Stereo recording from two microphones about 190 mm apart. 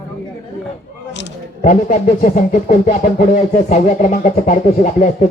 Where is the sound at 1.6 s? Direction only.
40° left (ahead or behind).